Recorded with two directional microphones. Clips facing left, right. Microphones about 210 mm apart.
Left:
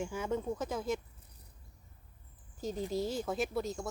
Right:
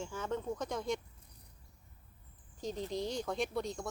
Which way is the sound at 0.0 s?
10° left (ahead or behind).